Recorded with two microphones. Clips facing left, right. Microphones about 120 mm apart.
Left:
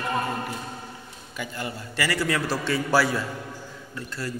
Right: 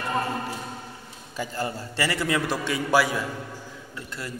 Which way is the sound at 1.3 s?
35° right (ahead or behind).